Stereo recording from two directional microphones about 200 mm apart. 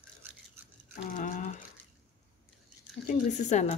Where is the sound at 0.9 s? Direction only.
40° left (ahead or behind).